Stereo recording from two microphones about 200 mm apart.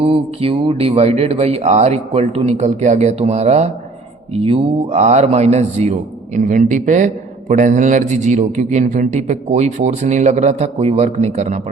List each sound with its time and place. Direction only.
0.0 s a man's voice: 25° right (ahead or behind)